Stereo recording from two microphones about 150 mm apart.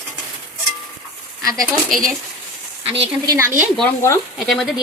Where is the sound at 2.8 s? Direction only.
40° right (ahead or behind).